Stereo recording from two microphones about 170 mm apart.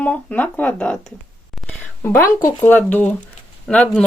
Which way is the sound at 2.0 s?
15° left (ahead or behind).